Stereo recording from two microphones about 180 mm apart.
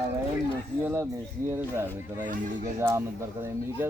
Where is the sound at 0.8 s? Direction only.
15° right (ahead or behind).